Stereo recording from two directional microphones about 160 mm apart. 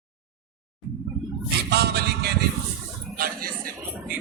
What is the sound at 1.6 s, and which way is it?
Music, 90° right.